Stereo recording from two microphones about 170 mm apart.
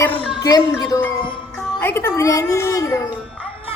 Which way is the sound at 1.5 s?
15° left (ahead or behind).